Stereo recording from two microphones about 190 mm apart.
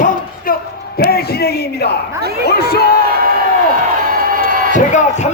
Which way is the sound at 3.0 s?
50° right (ahead or behind).